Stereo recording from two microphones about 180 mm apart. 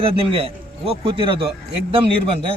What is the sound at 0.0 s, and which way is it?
A man's voice, 30° right (ahead or behind).